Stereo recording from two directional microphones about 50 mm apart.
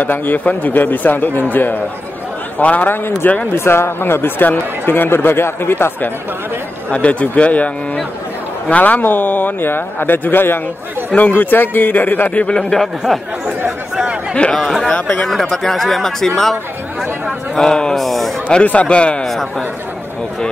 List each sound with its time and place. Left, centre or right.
0.0 s speech: left
2.6 s speech: left
3.5 s speech: left
6.9 s a man's voice: left
11.1 s speech: left
12.4 s speech: centre
14.3 s a man's voice: left
15.5 s speech: centre
17.6 s speech: centre
17.9 s speech: centre
18.5 s a man's voice: left